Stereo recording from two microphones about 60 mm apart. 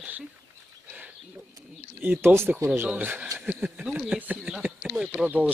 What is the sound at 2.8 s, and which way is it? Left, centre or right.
Speech, right.